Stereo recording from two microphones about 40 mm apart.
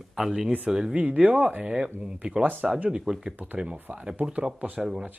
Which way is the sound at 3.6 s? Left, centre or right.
Right.